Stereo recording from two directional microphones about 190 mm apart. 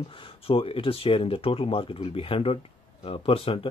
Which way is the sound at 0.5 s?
30° left (ahead or behind).